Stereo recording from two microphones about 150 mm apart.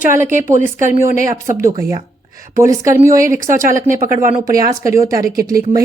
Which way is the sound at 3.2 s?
60° right (ahead or behind).